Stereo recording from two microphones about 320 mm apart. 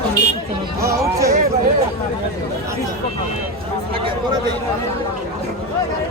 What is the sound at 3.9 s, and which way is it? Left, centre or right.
Speech, centre.